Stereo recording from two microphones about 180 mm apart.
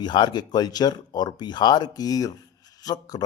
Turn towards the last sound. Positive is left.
turn(degrees=20)  # may be behind; listen again after turning